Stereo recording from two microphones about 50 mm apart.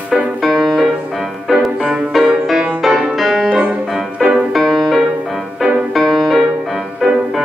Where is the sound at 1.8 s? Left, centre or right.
Centre.